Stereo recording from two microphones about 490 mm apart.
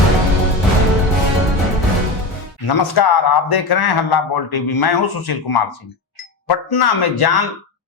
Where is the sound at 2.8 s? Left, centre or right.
Left.